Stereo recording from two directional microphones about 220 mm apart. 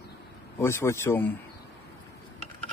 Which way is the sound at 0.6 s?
10° left (ahead or behind).